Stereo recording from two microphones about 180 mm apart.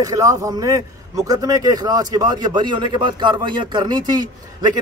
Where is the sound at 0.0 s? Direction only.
20° right (ahead or behind).